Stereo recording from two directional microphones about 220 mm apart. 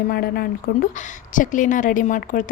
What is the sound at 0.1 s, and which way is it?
A woman's voice, 45° left (ahead or behind).